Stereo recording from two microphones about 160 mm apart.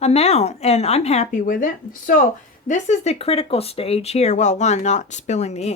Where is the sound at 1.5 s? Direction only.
55° left (ahead or behind).